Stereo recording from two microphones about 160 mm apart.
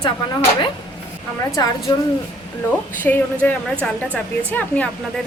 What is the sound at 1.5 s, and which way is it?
Speech, 20° left (ahead or behind).